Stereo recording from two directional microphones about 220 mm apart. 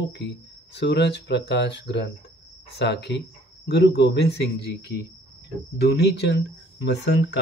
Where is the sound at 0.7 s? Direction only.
50° left (ahead or behind).